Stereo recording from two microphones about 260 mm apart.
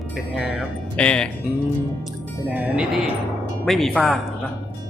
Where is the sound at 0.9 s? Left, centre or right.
Centre.